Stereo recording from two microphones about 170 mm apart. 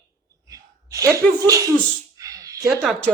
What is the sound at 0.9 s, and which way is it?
Speech, 20° right (ahead or behind).